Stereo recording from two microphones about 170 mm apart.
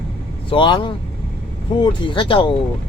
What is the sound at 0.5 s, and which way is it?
Speech, 30° left (ahead or behind).